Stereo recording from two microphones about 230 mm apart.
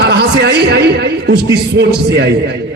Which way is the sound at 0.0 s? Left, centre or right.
Right.